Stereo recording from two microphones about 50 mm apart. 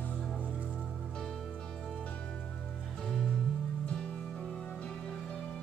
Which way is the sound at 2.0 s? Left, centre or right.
Left.